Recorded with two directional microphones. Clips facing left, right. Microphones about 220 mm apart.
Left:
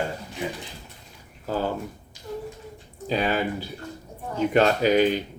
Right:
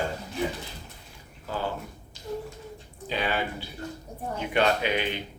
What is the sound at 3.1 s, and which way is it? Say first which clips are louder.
Speech: left 5 dB; 40° left (ahead or behind).